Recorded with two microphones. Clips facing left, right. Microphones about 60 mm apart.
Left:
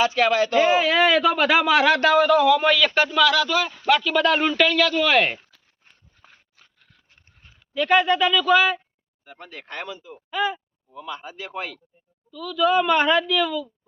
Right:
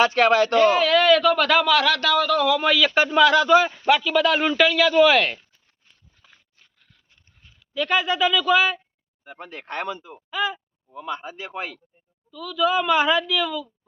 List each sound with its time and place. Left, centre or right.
0.0 s speech: right
0.6 s speech: centre
2.3 s a woman's voice: centre
2.9 s speech: centre
3.2 s speech: right
3.9 s a woman's voice: centre
5.8 s a sound: left
7.1 s a sound: left
7.7 s a woman's voice: centre
9.2 s speech: right
10.2 s speech: centre
10.9 s speech: right
12.3 s a woman's voice: centre